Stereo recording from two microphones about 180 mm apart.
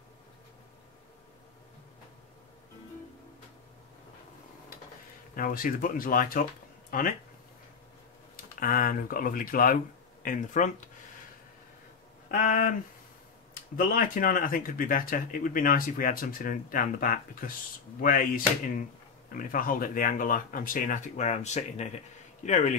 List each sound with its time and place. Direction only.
5.3 s speech: 50° left (ahead or behind)
8.4 s speech: 50° left (ahead or behind)
12.3 s speech: 45° left (ahead or behind)
13.7 s a man's voice: 50° left (ahead or behind)